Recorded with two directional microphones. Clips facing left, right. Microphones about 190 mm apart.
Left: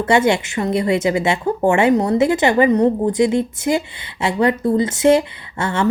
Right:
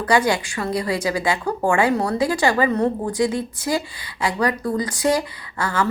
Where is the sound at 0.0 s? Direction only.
25° left (ahead or behind).